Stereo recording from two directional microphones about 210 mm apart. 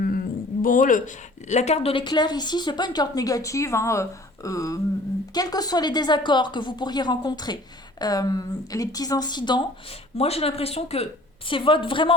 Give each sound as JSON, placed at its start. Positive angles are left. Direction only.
{"t": 0.6, "sound": "speech", "side_deg": 40}
{"t": 4.4, "sound": "a sound", "side_deg": 15}
{"t": 5.3, "sound": "speech", "side_deg": 20}